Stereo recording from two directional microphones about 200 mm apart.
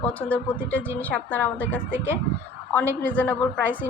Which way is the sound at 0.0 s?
5° left (ahead or behind).